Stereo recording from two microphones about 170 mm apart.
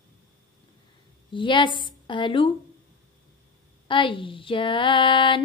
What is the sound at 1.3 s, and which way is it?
A woman's voice, 30° left (ahead or behind).